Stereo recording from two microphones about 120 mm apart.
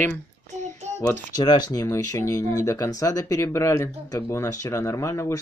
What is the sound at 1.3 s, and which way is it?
Speech, 35° left (ahead or behind).